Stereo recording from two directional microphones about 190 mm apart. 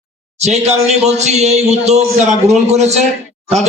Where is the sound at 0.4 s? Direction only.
35° right (ahead or behind).